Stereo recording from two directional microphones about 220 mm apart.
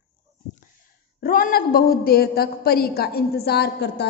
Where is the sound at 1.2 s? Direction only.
40° left (ahead or behind).